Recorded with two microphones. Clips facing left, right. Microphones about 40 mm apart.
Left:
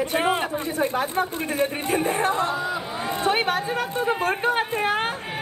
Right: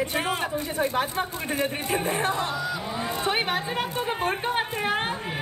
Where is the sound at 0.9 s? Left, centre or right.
Right.